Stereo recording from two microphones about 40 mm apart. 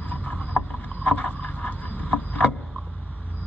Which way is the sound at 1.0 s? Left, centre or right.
Left.